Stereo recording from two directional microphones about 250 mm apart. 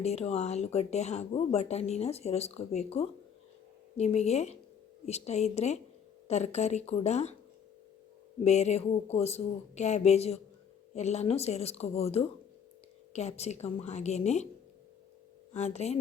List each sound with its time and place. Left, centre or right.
0.0 s speech: left
8.4 s speech: left
15.5 s speech: left